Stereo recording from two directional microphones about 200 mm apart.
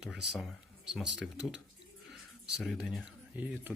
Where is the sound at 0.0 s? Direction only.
Centre (ahead or behind).